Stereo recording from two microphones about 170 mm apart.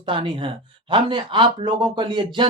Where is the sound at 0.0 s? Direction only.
30° right (ahead or behind).